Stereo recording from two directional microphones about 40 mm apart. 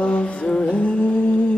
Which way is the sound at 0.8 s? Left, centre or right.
Left.